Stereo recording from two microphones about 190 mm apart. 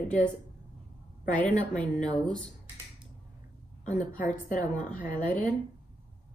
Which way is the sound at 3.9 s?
40° left (ahead or behind).